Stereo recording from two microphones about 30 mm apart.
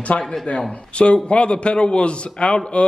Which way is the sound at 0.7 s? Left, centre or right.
Left.